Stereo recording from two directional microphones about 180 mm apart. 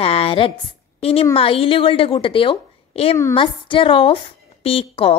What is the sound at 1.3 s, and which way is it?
A woman's voice, 30° left (ahead or behind).